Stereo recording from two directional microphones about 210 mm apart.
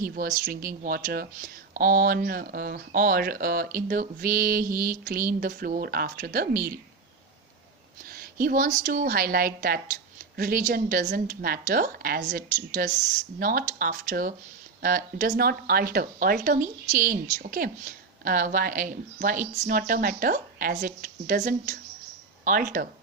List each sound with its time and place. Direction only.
0.0 s speech: 45° right (ahead or behind)
8.1 s speech: 45° right (ahead or behind)